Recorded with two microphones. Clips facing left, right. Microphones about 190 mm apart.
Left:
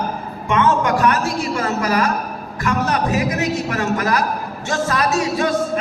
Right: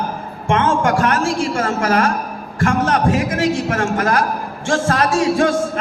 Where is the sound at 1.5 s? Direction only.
50° right (ahead or behind).